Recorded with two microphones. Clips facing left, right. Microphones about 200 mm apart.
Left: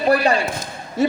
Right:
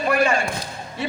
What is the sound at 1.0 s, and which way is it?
Music, 40° left (ahead or behind).